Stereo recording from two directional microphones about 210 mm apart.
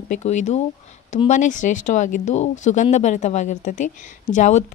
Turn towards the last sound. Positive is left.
turn(degrees=35)  # may be behind; listen again after turning